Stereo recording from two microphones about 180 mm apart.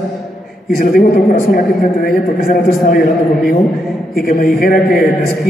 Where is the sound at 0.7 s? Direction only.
50° left (ahead or behind).